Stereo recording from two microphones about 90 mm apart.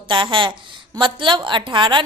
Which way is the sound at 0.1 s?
65° right (ahead or behind).